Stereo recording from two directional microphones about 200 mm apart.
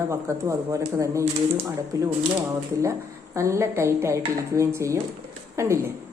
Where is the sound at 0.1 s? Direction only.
15° right (ahead or behind).